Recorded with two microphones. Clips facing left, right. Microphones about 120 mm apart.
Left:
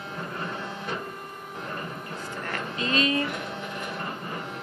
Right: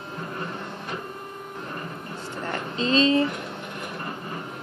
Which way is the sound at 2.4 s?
25° right (ahead or behind).